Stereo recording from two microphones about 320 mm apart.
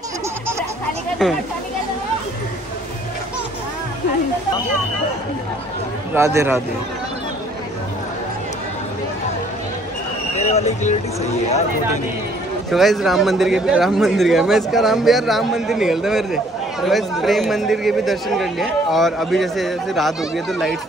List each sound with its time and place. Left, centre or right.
1.2 s speech: centre
6.1 s speech: centre
10.4 s speech: centre
12.7 s speech: centre